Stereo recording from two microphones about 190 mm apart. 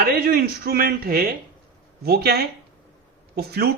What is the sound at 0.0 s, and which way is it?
Speech, 50° right (ahead or behind).